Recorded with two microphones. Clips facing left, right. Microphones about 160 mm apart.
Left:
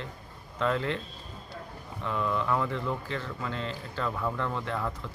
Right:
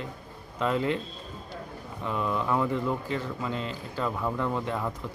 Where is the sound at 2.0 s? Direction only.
15° right (ahead or behind).